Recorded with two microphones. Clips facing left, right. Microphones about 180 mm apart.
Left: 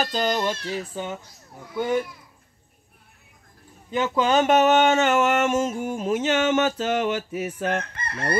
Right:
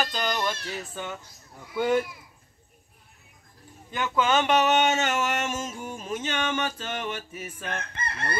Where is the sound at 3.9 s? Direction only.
30° left (ahead or behind); by 7.8 s 70° left (ahead or behind).